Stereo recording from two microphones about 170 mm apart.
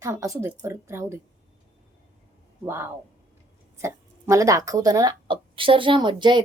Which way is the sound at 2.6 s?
15° right (ahead or behind).